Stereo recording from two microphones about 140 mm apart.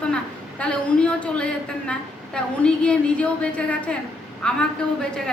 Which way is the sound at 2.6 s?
5° left (ahead or behind).